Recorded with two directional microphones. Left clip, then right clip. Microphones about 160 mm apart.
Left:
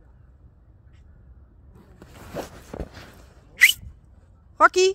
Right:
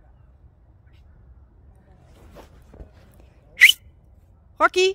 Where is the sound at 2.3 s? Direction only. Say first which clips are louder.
Left 14 dB; 90° left.